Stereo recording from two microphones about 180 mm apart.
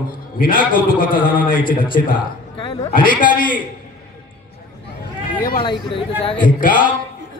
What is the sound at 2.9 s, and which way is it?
Speech, 50° left (ahead or behind).